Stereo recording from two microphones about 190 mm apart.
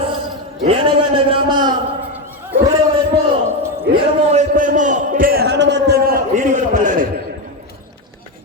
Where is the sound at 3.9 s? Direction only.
65° right (ahead or behind).